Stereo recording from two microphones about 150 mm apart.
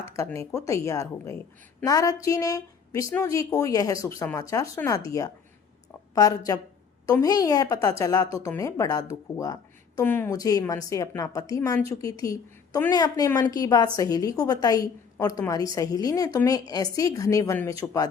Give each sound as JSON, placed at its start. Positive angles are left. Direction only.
{"t": 0.3, "sound": "a woman's voice", "side_deg": 20}